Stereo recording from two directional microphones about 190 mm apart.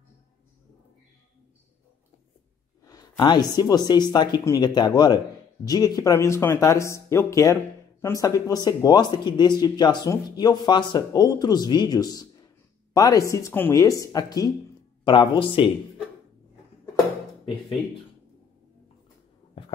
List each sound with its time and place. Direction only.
2.8 s speech: 20° left (ahead or behind)